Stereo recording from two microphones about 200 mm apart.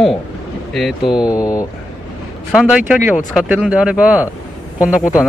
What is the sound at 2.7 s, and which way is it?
A man's voice, 5° right (ahead or behind).